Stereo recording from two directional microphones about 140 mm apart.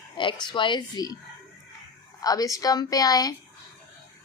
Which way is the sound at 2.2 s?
25° left (ahead or behind).